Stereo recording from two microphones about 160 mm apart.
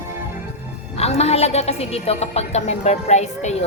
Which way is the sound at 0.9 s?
40° left (ahead or behind).